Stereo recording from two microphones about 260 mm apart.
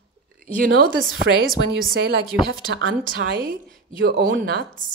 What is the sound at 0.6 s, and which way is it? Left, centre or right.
Speech, right.